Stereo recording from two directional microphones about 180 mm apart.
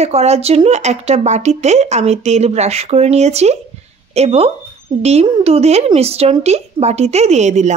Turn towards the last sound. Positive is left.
turn(degrees=-40)  # may be behind; listen again after turning